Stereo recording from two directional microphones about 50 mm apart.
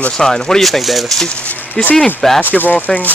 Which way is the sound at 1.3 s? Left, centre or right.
Left.